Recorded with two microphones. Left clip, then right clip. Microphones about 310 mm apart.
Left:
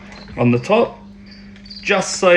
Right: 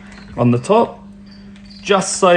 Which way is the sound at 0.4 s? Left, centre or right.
Right.